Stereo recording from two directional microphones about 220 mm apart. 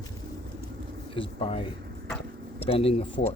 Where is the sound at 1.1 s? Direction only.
25° left (ahead or behind).